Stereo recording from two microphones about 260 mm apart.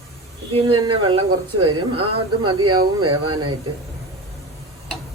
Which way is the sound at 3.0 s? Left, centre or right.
Right.